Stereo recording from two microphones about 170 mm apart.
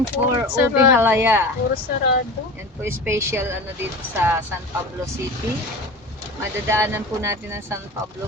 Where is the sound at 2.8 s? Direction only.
15° right (ahead or behind).